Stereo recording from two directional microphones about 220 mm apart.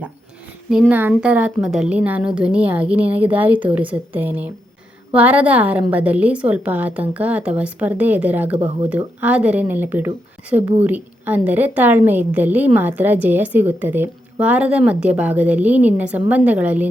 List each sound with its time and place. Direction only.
0.7 s a woman's voice: 5° right (ahead or behind)
8.5 s speech: 25° right (ahead or behind)
8.9 s a woman's voice: 5° right (ahead or behind)